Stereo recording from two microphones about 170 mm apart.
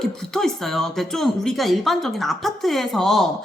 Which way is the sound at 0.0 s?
Centre (ahead or behind).